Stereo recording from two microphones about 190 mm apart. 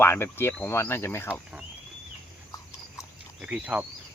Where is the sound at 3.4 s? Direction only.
5° right (ahead or behind).